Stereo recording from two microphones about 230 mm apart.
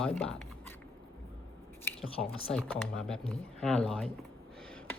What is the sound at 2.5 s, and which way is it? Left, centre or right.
Speech, centre.